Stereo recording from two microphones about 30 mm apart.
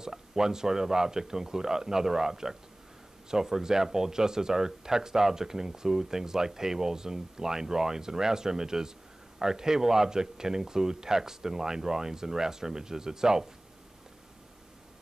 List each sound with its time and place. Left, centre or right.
0.0 s speech: centre